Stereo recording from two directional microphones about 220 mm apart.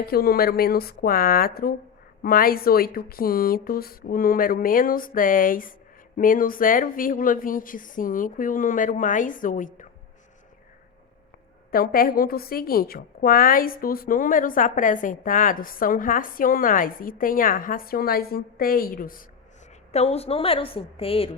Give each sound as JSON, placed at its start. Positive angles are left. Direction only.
{"t": 0.0, "sound": "speech", "side_deg": 45}
{"t": 11.7, "sound": "speech", "side_deg": 40}
{"t": 19.9, "sound": "a woman's voice", "side_deg": 30}